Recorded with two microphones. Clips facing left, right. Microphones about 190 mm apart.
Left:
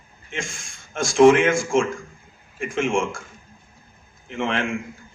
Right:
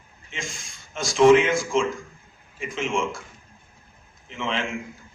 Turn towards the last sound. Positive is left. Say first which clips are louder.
# left 4 dB
turn(degrees=55)  # may be behind; listen again after turning